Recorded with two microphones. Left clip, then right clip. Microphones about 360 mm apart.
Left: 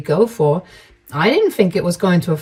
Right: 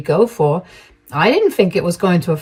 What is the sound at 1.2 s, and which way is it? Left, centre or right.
Speech, right.